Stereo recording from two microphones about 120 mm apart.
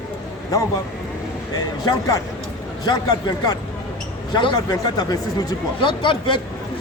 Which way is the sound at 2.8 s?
35° left (ahead or behind).